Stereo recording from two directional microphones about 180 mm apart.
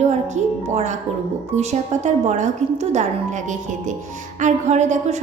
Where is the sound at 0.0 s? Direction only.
40° right (ahead or behind).